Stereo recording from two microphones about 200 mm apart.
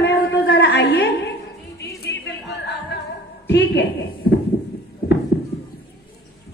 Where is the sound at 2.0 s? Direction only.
55° left (ahead or behind).